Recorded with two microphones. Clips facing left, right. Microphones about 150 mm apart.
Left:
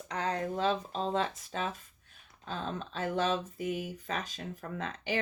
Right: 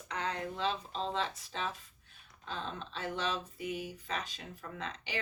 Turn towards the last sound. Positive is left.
turn(degrees=45)  # may be behind; listen again after turning